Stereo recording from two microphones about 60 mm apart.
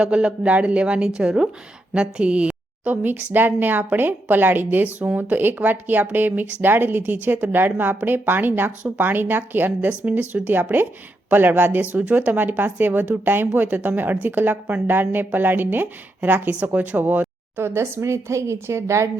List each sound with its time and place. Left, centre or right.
0.0 s a woman's voice: centre; by 17.2 s right
17.6 s speech: right